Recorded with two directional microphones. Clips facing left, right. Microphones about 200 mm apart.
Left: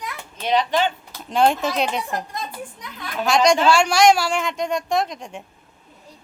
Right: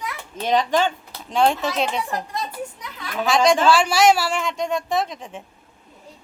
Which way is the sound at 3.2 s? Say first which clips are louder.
Even; centre (ahead or behind).